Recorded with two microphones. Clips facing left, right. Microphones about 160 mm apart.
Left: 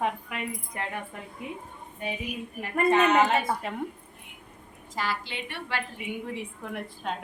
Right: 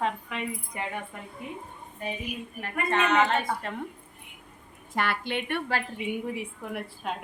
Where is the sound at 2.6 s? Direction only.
10° left (ahead or behind).